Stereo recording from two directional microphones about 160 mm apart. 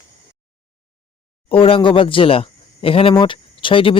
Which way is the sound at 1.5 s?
35° left (ahead or behind).